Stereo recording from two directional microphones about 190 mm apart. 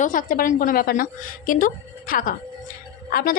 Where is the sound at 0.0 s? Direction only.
45° left (ahead or behind).